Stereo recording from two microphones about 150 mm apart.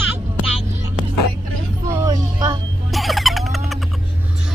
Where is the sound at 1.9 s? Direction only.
25° right (ahead or behind).